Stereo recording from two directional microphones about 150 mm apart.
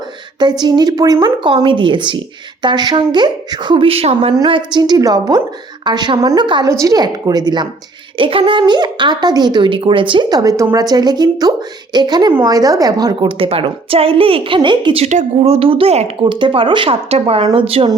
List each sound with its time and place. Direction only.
0.3 s a woman's voice: 30° right (ahead or behind)
15.0 s a woman's voice: 45° right (ahead or behind)